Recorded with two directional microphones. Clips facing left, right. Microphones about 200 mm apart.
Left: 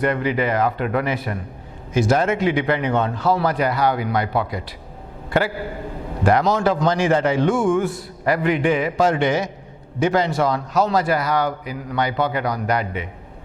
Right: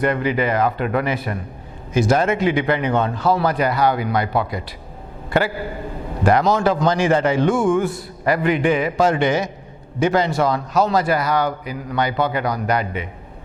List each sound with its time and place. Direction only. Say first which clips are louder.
0.0 s a man's voice: right 1 dB; 15° right (ahead or behind)